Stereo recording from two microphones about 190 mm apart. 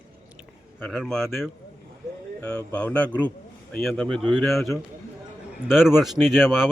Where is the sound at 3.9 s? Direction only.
Centre (ahead or behind).